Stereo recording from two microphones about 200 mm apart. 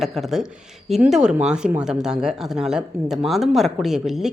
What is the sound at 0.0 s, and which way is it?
Speech, centre (ahead or behind).